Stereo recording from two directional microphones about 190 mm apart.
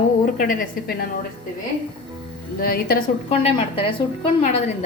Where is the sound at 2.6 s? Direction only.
55° left (ahead or behind).